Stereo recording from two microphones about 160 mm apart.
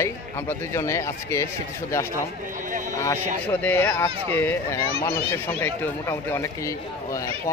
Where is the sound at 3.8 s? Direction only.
15° left (ahead or behind).